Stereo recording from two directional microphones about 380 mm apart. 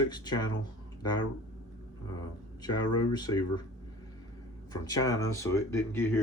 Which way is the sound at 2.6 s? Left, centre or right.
Centre.